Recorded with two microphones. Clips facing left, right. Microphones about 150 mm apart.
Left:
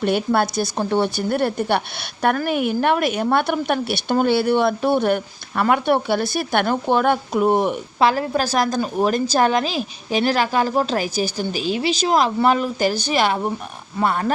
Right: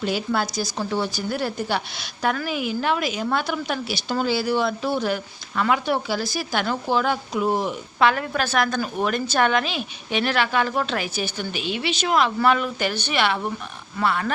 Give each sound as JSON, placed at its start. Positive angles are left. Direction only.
{"t": 0.0, "sound": "a woman's voice", "side_deg": 60}
{"t": 7.9, "sound": "a woman's voice", "side_deg": 30}